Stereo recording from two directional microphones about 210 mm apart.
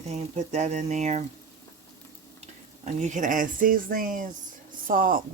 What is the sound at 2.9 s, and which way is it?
Speech, 35° right (ahead or behind).